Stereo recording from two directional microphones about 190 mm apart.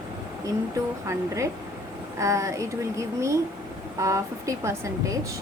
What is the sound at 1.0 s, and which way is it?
Speech, 15° right (ahead or behind).